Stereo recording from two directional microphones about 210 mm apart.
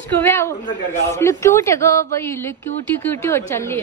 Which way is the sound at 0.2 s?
10° left (ahead or behind).